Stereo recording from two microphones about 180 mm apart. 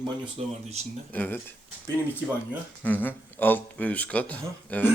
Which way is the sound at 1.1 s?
10° left (ahead or behind).